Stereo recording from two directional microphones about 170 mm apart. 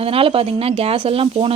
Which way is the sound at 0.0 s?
35° right (ahead or behind).